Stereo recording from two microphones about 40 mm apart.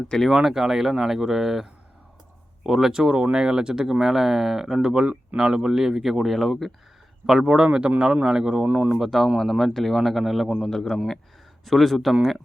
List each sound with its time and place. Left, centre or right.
0.1 s speech: left
0.4 s speech: centre
2.6 s speech: centre
4.0 s speech: centre
7.4 s speech: right
8.6 s speech: right
9.0 s speech: centre
10.7 s a man's voice: centre